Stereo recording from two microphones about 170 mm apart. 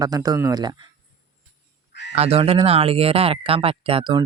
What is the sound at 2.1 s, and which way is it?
Speech, 35° right (ahead or behind).